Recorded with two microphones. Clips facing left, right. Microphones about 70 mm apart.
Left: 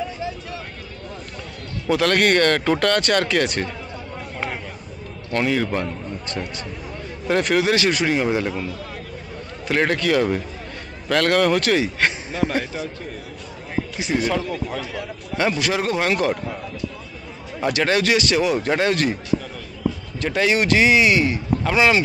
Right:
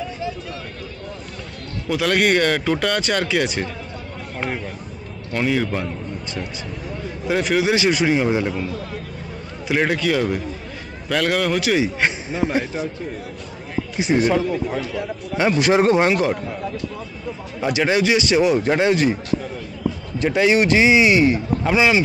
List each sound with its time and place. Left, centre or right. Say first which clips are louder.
1.9 s a man's voice: left 1 dB; centre
5.3 s a man's voice: even; centre
7.2 s a man's voice: even; centre
9.7 s a man's voice: even; centre
13.9 s speech: right 5 dB; centre
15.7 s speech: right 7 dB; right
16.1 s speech: right 2 dB; centre
17.7 s speech: right 2 dB; centre
20.2 s speech: right 4 dB; centre
21.7 s a man's voice: even; centre